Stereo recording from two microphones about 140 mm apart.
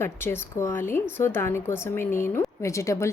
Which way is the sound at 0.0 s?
20° left (ahead or behind).